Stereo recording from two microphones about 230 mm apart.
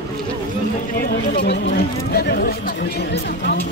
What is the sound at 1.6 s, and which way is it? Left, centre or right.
Speech, left.